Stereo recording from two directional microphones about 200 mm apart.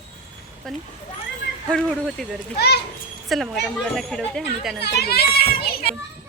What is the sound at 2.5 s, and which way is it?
Speech, 55° left (ahead or behind).